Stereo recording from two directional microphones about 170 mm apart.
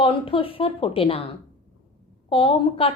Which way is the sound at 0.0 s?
30° left (ahead or behind).